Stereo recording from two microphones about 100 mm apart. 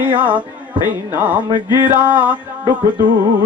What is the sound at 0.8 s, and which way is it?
A man's voice, 15° right (ahead or behind).